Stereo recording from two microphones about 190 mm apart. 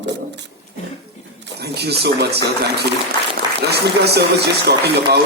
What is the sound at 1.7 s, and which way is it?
Speech, 60° right (ahead or behind).